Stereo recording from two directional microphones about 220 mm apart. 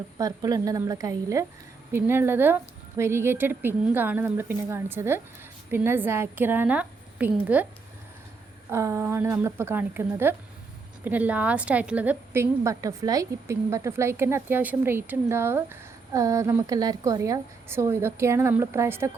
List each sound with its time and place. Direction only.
0.2 s a woman's voice: 15° right (ahead or behind)
8.7 s a woman's voice: 10° right (ahead or behind)